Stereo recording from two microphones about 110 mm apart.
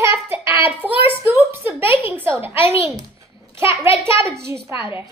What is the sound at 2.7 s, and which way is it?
A child's voice, 30° right (ahead or behind).